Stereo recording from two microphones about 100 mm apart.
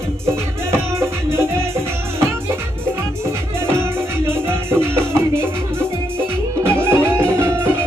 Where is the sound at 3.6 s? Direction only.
25° right (ahead or behind).